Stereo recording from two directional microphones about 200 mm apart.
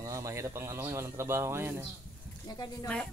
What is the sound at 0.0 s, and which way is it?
Speech, 15° right (ahead or behind).